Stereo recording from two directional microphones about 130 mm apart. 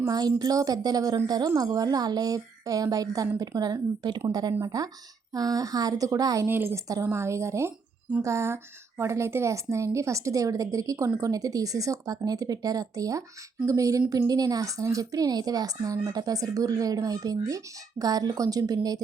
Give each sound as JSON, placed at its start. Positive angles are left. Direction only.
{"t": 0.0, "sound": "a woman's voice", "side_deg": -30}